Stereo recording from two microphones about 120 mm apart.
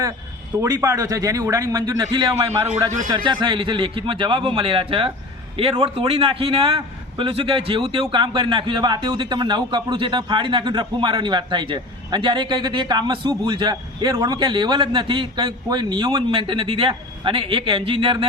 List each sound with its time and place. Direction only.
0.7 s a man's voice: 25° right (ahead or behind); by 18.3 s 45° right (ahead or behind)